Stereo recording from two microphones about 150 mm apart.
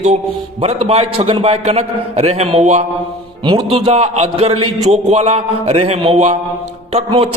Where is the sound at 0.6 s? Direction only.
45° right (ahead or behind).